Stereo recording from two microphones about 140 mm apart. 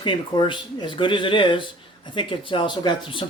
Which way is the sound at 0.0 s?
35° left (ahead or behind).